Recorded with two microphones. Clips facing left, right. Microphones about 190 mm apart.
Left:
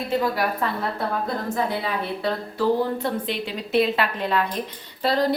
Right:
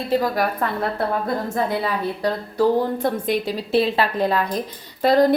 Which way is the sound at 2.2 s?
45° right (ahead or behind).